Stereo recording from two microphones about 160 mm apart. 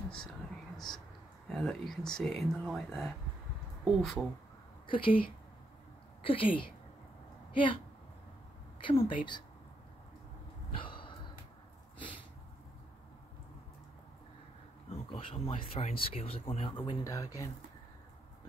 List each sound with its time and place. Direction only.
0.2 s whispering: centre (ahead or behind)
1.5 s speech: centre (ahead or behind)
4.8 s speech: 30° left (ahead or behind)
6.2 s speech: 35° left (ahead or behind)
8.8 s speech: 35° left (ahead or behind)
10.7 s a sound: 30° left (ahead or behind)
14.9 s speech: 35° left (ahead or behind)
17.0 s speech: 20° left (ahead or behind)